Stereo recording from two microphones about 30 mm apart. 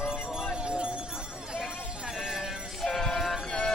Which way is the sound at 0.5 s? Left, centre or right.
Right.